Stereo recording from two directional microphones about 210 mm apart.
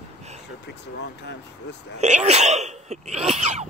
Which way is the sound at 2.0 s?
30° right (ahead or behind).